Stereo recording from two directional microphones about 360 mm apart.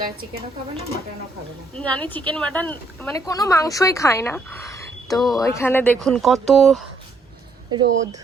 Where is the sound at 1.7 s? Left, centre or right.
Centre.